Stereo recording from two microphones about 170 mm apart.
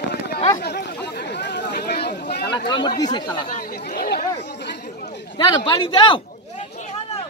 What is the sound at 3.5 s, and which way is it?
Chatter, 60° left (ahead or behind).